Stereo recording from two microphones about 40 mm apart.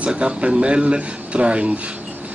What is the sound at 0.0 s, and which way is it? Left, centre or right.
A man's voice, right.